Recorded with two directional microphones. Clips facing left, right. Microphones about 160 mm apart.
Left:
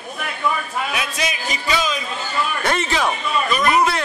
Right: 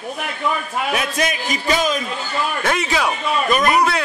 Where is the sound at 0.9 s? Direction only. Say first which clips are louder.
Right 4 dB; 50° right (ahead or behind).